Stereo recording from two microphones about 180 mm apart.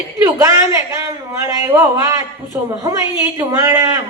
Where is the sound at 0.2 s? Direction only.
20° right (ahead or behind).